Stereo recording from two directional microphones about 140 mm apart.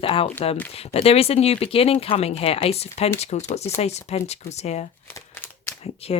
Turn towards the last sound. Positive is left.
turn(degrees=45)  # may be behind; listen again after turning